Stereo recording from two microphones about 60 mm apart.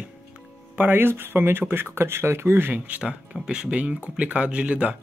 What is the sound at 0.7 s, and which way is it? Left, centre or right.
Speech, right.